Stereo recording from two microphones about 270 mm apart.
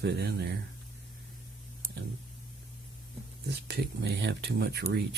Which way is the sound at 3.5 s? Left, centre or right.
Right.